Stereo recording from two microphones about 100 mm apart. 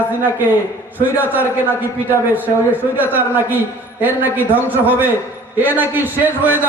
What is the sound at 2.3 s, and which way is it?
A man's voice, 15° right (ahead or behind).